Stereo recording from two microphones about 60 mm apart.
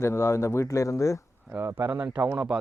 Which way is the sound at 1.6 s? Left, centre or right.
Right.